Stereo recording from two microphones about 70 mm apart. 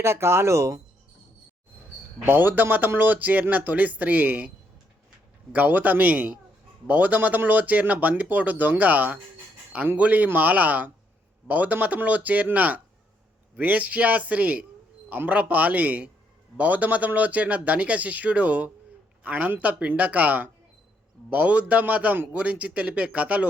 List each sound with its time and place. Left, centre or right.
0.0 s speech: right
2.2 s speech: right